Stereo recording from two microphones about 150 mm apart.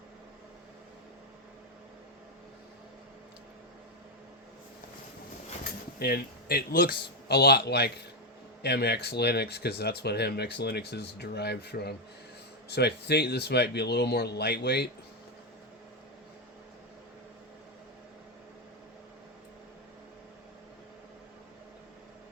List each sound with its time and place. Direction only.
5.6 s speech: 90° left